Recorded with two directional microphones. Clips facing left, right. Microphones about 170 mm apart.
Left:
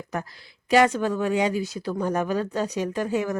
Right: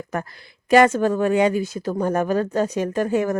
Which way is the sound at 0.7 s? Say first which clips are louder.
Right 4 dB; 50° right (ahead or behind).